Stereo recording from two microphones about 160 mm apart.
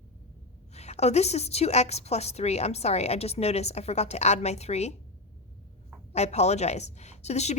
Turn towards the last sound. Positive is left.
turn(degrees=45)  # may be behind; listen again after turning